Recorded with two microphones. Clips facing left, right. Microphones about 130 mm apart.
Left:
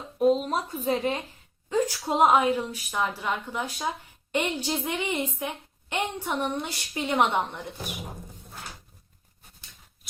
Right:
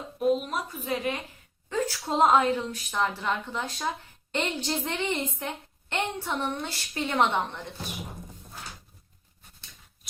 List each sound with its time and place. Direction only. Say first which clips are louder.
0.2 s speech: left 3 dB; 35° left (ahead or behind)
1.7 s a woman's voice: left 3 dB; 15° left (ahead or behind)